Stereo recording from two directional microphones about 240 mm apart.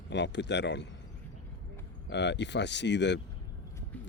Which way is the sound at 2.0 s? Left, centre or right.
Left.